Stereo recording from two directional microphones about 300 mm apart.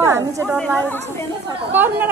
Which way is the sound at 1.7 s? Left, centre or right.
Centre.